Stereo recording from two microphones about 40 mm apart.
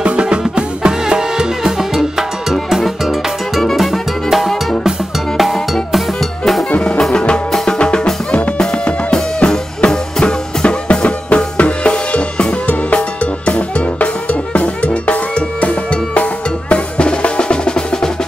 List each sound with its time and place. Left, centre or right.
0.0 s music: right
2.5 s music: centre
7.1 s music: left
10.2 s drum: left